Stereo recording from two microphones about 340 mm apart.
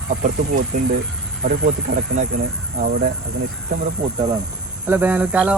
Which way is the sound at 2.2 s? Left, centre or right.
Right.